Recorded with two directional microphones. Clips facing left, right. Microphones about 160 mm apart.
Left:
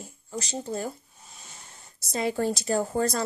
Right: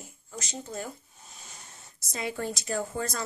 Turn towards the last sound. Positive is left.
turn(degrees=35)  # may be behind; listen again after turning